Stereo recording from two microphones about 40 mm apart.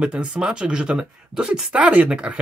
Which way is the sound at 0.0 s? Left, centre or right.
Right.